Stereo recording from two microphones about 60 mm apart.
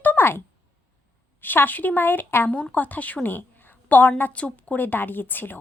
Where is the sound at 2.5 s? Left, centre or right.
Left.